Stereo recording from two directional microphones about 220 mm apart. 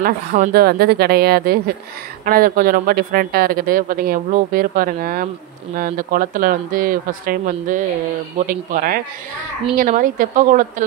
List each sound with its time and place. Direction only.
0.0 s speech: 40° right (ahead or behind)